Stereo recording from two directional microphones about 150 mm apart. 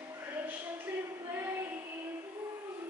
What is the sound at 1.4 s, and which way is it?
Child singing, 15° right (ahead or behind).